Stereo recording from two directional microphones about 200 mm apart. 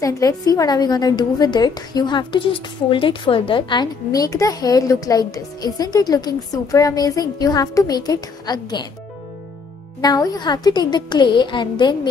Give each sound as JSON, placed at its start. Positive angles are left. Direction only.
{"t": 0.0, "sound": "a woman's voice", "side_deg": 15}
{"t": 10.0, "sound": "a woman's voice", "side_deg": 20}